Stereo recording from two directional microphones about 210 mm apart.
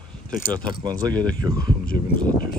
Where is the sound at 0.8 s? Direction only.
20° right (ahead or behind).